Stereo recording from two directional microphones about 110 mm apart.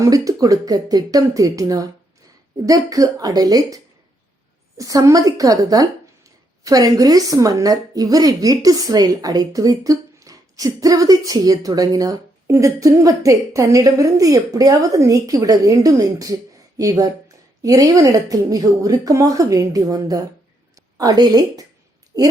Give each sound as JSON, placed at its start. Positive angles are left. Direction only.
{"t": 0.0, "sound": "speech", "side_deg": -30}
{"t": 4.8, "sound": "speech", "side_deg": -30}